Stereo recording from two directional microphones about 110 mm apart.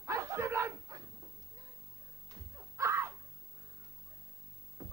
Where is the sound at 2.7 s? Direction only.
25° right (ahead or behind).